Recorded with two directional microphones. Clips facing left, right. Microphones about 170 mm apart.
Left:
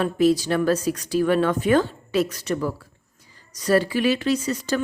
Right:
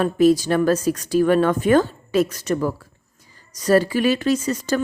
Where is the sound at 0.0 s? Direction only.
45° right (ahead or behind).